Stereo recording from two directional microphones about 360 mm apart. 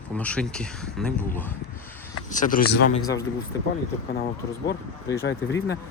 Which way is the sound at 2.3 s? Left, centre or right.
Left.